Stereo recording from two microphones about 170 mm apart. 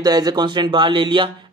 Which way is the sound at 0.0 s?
25° right (ahead or behind).